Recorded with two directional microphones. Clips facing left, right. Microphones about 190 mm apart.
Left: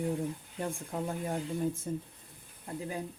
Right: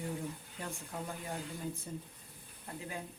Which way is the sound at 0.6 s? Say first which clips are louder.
Left 7 dB; 45° left (ahead or behind).